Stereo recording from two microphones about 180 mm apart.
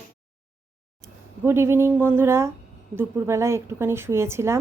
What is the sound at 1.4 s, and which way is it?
A woman's voice, 15° right (ahead or behind).